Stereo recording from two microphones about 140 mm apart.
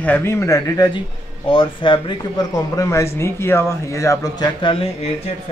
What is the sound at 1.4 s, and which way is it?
Speech, 35° left (ahead or behind).